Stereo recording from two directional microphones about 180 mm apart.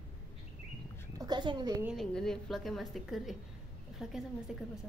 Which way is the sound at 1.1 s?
25° right (ahead or behind).